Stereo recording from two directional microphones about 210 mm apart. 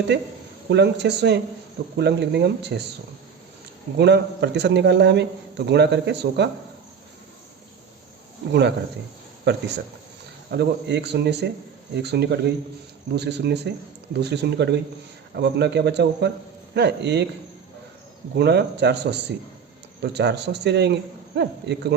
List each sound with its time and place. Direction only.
0.1 s a man's voice: 55° right (ahead or behind)
3.9 s a man's voice: 50° right (ahead or behind)
9.4 s a man's voice: 55° right (ahead or behind)
18.3 s a man's voice: 55° right (ahead or behind)
20.0 s a man's voice: 55° right (ahead or behind)